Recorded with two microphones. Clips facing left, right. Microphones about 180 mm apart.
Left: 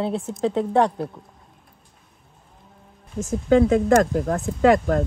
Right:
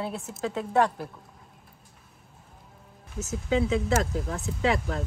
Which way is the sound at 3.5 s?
50° left (ahead or behind).